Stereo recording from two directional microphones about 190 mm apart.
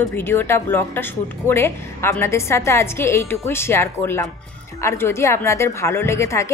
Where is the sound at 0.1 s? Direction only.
10° left (ahead or behind).